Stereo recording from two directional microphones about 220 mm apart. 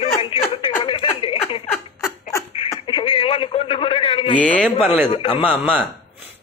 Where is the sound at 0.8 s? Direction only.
20° left (ahead or behind).